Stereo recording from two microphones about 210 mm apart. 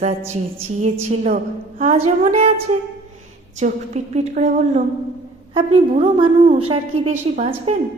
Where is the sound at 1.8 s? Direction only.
30° right (ahead or behind).